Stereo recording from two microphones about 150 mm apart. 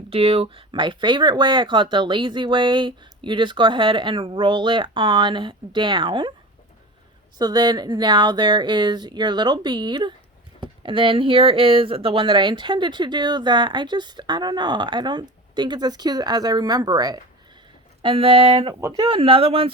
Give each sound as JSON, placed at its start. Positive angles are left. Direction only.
{"t": 0.1, "sound": "speech", "side_deg": -40}
{"t": 7.3, "sound": "speech", "side_deg": -30}
{"t": 18.7, "sound": "speech", "side_deg": -20}
{"t": 19.0, "sound": "speech", "side_deg": -40}